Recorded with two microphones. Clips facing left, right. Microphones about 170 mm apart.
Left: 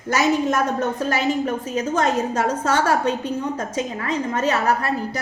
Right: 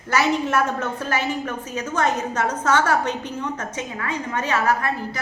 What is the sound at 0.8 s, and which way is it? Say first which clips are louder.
A woman's voice: left 4 dB; 30° left (ahead or behind).